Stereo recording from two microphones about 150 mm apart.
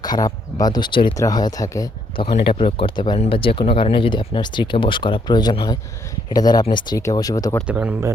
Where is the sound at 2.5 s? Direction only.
40° left (ahead or behind).